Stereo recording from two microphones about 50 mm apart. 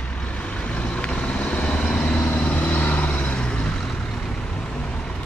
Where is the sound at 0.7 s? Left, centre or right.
Left.